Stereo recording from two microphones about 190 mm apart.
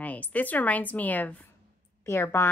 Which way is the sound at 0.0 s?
10° left (ahead or behind).